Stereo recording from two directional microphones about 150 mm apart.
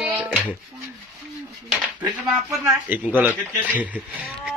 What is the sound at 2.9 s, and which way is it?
A man's voice, 10° right (ahead or behind).